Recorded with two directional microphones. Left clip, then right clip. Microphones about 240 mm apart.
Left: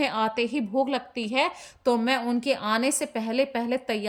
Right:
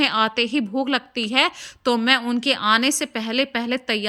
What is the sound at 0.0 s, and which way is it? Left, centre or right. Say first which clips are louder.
A woman's voice: right 6 dB; centre.